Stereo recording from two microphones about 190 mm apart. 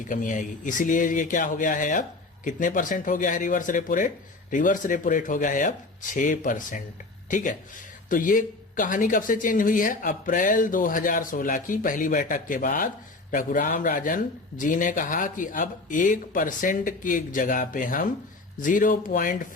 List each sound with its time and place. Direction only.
0.1 s speech: 45° left (ahead or behind)